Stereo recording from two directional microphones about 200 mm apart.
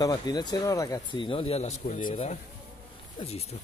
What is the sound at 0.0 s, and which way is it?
Speech, 20° left (ahead or behind).